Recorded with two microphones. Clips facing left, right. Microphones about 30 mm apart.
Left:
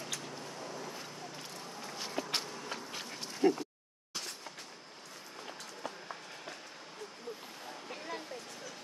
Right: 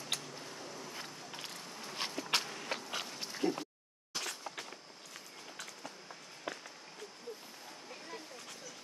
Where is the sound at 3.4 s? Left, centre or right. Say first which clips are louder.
Left 6 dB; centre.